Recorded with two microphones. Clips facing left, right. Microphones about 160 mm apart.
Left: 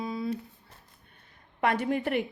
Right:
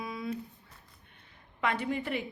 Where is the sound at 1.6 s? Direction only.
50° left (ahead or behind).